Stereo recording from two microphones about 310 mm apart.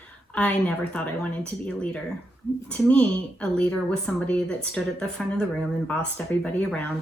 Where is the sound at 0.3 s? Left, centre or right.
Centre.